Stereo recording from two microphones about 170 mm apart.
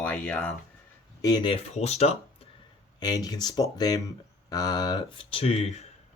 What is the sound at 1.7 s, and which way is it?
Speech, 40° left (ahead or behind).